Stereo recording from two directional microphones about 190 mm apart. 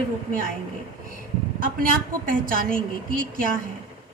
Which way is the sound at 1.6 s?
45° right (ahead or behind).